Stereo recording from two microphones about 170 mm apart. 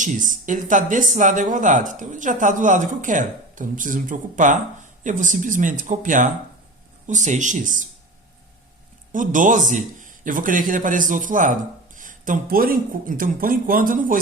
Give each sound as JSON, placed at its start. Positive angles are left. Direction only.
{"t": 0.0, "sound": "speech", "side_deg": -50}
{"t": 9.1, "sound": "speech", "side_deg": -50}